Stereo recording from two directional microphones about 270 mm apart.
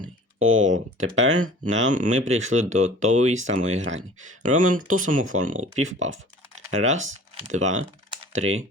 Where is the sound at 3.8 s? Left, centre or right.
Right.